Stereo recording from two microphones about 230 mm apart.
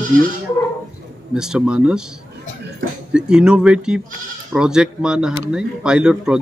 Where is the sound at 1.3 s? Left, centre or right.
Centre.